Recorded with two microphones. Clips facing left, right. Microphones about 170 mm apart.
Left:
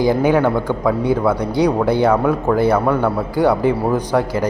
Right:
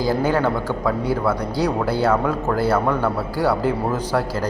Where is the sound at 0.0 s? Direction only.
15° left (ahead or behind).